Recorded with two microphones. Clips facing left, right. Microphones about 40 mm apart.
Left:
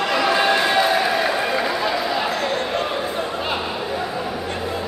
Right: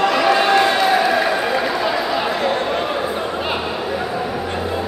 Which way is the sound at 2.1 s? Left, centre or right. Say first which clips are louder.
Right 3 dB; centre.